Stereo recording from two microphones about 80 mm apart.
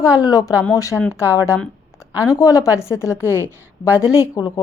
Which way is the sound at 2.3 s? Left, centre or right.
Left.